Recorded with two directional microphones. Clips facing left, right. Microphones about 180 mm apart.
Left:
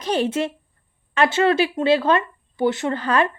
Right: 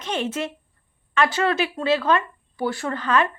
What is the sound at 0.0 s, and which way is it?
Speech, 35° left (ahead or behind).